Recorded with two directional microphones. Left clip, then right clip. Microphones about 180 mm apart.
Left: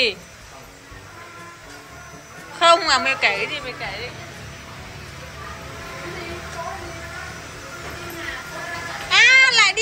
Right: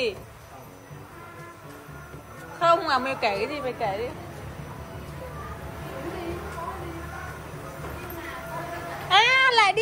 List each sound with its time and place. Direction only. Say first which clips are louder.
2.6 s a woman's voice: left 6 dB; 5° right (ahead or behind)
3.5 s speech: right 1 dB; 35° right (ahead or behind)
9.1 s children playing: left 5 dB; 25° right (ahead or behind)